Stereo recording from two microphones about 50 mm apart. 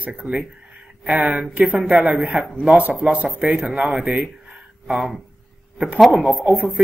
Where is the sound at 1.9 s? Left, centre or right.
Right.